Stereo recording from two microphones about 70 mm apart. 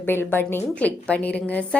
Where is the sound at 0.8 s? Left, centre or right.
Centre.